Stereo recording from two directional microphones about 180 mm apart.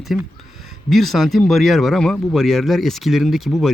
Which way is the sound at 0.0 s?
Centre (ahead or behind).